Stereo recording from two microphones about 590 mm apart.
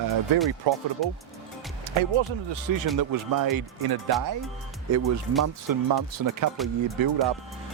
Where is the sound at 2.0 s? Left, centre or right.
Right.